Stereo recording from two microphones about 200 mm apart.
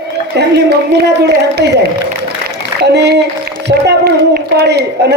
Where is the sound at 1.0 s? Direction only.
55° right (ahead or behind).